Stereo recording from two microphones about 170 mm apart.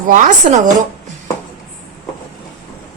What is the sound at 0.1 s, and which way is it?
Speech, 45° right (ahead or behind).